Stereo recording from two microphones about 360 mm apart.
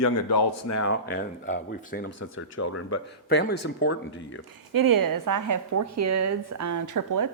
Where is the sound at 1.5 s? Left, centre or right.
Left.